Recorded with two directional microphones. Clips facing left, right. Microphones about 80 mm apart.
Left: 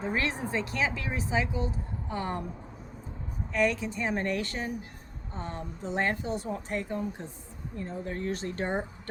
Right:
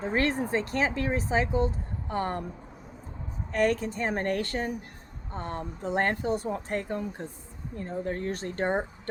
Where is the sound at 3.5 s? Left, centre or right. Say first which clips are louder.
Right 2 dB; right.